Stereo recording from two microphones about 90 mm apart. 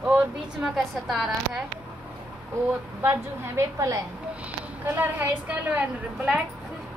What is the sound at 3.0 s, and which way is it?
A woman's voice, 30° right (ahead or behind).